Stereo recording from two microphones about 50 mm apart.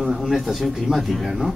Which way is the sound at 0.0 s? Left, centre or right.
Centre.